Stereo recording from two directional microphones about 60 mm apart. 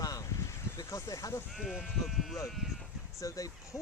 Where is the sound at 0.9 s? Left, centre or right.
Left.